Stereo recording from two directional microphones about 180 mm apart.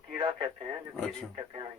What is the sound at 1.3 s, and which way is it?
Speech, 25° right (ahead or behind).